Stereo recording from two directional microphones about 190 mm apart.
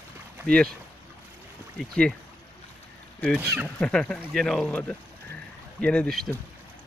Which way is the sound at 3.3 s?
10° right (ahead or behind).